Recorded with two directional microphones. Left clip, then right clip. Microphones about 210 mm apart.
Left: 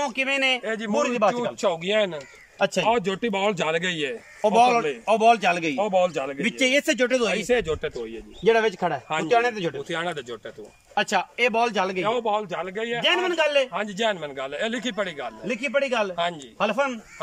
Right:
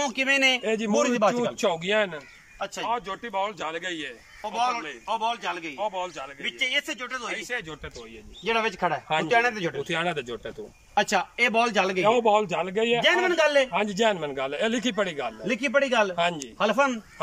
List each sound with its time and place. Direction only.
0.0 s a man's voice: 5° left (ahead or behind)
0.6 s a man's voice: 10° right (ahead or behind)
0.9 s a man's voice: 5° left (ahead or behind)
2.6 s speech: 50° left (ahead or behind)
8.5 s speech: 25° left (ahead or behind)
9.8 s a man's voice: centre (ahead or behind)
12.0 s a man's voice: 10° right (ahead or behind)
13.0 s a man's voice: 5° left (ahead or behind)